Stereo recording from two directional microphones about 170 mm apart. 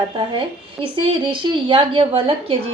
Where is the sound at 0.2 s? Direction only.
30° right (ahead or behind).